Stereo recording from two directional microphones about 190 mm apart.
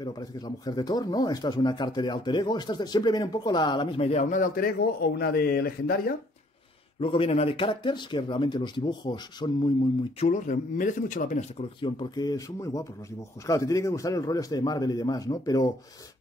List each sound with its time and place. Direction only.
0.0 s speech: 20° left (ahead or behind); by 4.6 s 45° left (ahead or behind)
4.7 s speech: 60° left (ahead or behind)
7.0 s speech: 30° left (ahead or behind)
10.2 s speech: 40° left (ahead or behind)
11.8 s speech: 20° left (ahead or behind)